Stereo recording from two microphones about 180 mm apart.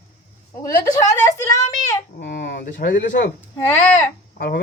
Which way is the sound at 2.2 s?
55° left (ahead or behind).